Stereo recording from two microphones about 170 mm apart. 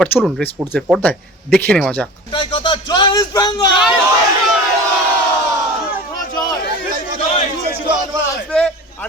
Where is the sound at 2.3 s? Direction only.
30° left (ahead or behind).